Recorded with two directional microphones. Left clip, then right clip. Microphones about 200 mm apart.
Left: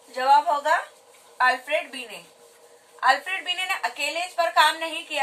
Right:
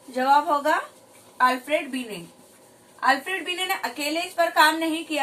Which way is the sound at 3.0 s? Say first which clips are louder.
Left 1 dB; 15° right (ahead or behind).